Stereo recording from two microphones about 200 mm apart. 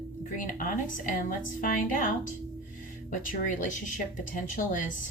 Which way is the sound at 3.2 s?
40° left (ahead or behind).